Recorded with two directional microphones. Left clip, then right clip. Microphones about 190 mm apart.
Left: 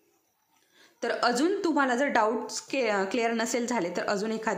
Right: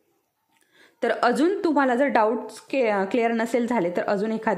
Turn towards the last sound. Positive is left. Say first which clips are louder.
# right 5 dB
turn(degrees=-25)  # may be behind; listen again after turning